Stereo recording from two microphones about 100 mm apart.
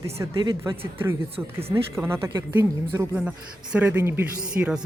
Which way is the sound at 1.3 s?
75° right (ahead or behind).